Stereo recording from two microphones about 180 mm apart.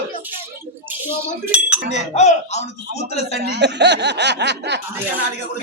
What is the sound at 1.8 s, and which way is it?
Speech, 40° left (ahead or behind).